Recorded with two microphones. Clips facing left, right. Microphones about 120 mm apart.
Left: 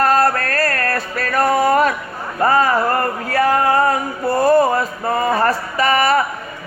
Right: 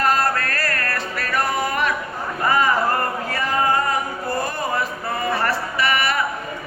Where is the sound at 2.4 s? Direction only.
45° left (ahead or behind).